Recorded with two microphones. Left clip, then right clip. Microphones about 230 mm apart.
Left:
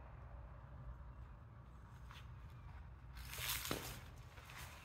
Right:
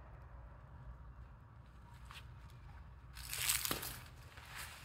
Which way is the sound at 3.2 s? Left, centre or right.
Right.